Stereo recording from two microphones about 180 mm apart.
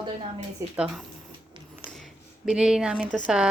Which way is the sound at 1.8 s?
Centre (ahead or behind).